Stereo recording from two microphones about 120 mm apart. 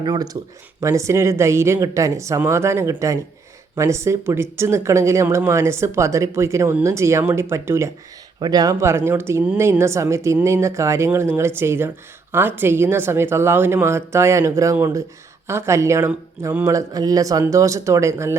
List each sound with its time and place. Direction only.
0.0 s speech: 35° right (ahead or behind)
8.4 s speech: 35° right (ahead or behind)
16.7 s speech: 30° right (ahead or behind)